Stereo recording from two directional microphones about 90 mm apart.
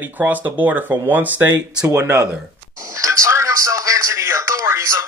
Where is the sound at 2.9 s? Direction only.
35° right (ahead or behind).